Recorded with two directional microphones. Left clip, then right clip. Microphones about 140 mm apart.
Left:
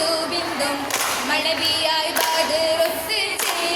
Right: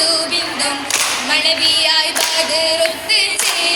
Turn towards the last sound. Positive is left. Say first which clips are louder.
# right 6 dB
turn(degrees=-20)  # may be behind; listen again after turning